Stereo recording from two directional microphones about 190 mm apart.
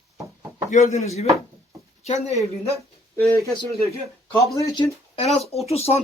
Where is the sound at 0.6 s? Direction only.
35° left (ahead or behind).